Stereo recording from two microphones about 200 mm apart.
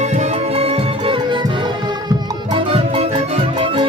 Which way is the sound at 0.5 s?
30° right (ahead or behind).